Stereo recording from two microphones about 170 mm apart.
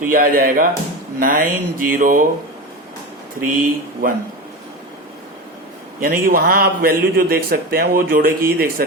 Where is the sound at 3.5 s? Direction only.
55° right (ahead or behind).